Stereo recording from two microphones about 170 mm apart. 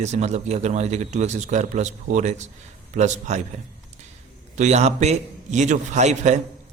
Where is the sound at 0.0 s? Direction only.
40° right (ahead or behind).